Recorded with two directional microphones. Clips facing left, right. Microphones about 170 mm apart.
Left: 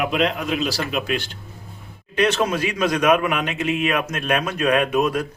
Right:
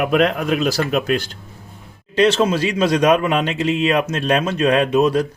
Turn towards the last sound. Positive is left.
turn(degrees=-30)  # may be behind; listen again after turning